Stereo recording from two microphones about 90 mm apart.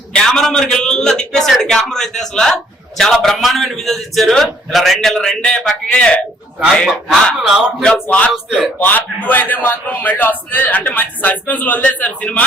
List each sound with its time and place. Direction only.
0.1 s a man's voice: 5° left (ahead or behind)
8.1 s a man's voice: 10° left (ahead or behind)